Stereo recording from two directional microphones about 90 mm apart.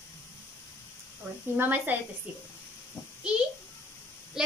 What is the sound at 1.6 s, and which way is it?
Speech, 20° right (ahead or behind).